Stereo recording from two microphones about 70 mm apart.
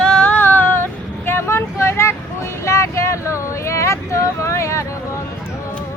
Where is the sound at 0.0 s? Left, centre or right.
Centre; by 4.9 s left.